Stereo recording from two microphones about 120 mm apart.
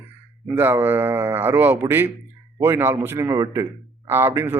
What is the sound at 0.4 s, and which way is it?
A man's voice, 15° right (ahead or behind).